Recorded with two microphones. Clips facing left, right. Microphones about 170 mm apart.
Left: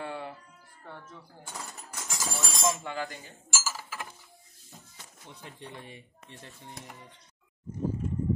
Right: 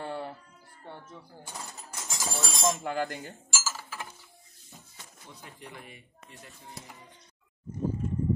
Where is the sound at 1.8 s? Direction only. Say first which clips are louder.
Even; 20° right (ahead or behind).